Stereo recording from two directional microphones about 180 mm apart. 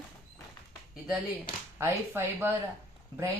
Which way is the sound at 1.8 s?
10° right (ahead or behind).